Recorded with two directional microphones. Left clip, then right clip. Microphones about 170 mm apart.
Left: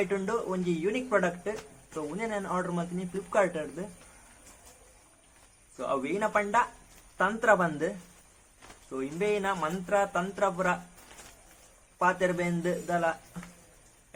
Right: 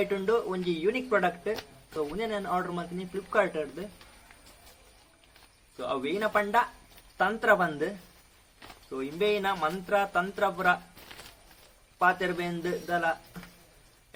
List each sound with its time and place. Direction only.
0.1 s a man's voice: 10° left (ahead or behind)
5.7 s a man's voice: 5° left (ahead or behind)
9.0 s a man's voice: 10° left (ahead or behind)
11.9 s a man's voice: 5° left (ahead or behind)